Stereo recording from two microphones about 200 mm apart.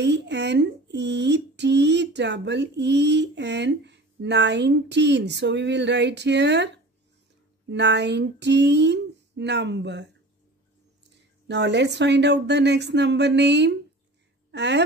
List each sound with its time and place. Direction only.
0.0 s speech: 60° right (ahead or behind)
7.7 s speech: 60° right (ahead or behind)
11.4 s speech: 60° right (ahead or behind)